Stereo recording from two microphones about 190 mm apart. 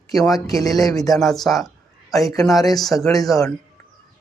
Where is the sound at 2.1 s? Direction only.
20° left (ahead or behind).